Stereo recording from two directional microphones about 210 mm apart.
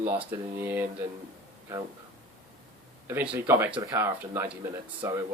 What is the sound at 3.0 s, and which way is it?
Speech, 10° right (ahead or behind).